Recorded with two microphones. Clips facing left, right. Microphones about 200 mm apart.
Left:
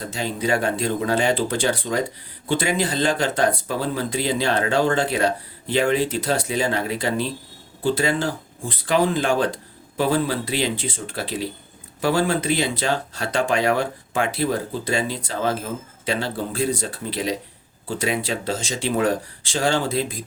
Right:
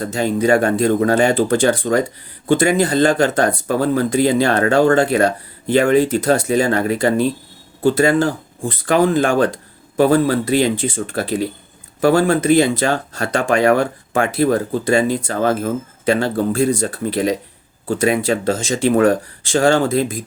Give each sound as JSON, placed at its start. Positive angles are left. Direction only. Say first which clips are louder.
{"t": 0.1, "sound": "speech", "louder": "right 8 dB", "side_deg": -50}